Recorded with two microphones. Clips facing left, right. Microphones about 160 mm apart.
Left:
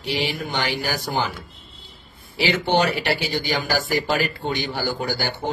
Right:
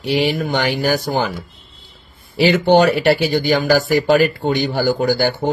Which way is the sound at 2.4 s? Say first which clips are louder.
Right 8 dB; 50° right (ahead or behind).